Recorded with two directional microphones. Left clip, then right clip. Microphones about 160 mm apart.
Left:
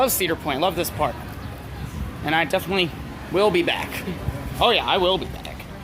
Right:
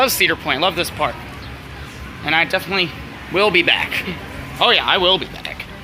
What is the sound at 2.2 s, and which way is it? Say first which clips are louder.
Speech: right 4 dB; 20° left (ahead or behind).